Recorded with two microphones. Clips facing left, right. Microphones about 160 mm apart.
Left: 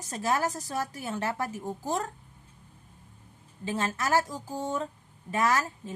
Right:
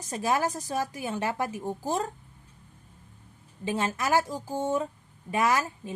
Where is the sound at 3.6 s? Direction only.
15° right (ahead or behind).